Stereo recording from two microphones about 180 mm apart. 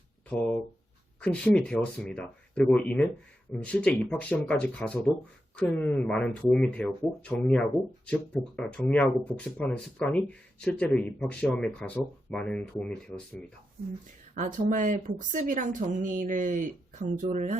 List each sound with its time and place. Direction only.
0.3 s speech: 5° left (ahead or behind)
14.3 s speech: 45° right (ahead or behind)